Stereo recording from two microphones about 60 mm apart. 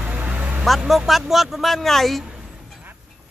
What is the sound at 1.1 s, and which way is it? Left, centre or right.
Speech, centre.